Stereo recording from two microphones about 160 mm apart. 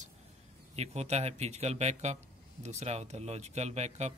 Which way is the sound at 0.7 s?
40° right (ahead or behind).